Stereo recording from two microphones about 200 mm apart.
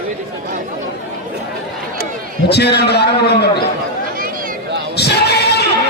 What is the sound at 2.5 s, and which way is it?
Speech, 55° left (ahead or behind).